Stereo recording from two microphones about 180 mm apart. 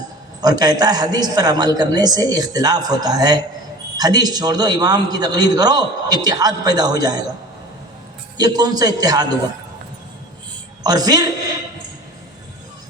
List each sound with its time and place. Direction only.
0.4 s a man's voice: 20° right (ahead or behind)
8.4 s a man's voice: 20° right (ahead or behind)
10.8 s a man's voice: 20° right (ahead or behind)